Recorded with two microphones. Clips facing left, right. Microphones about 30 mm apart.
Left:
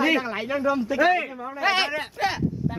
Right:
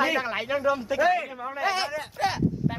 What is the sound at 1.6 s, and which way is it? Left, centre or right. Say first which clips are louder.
Speech: left 5 dB; left.